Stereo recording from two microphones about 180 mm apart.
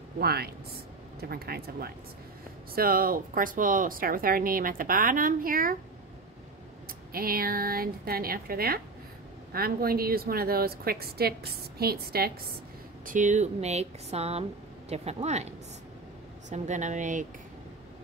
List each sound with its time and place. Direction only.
0.2 s a woman's voice: 60° right (ahead or behind)
6.9 s a woman's voice: 55° right (ahead or behind)
13.0 s speech: 45° right (ahead or behind)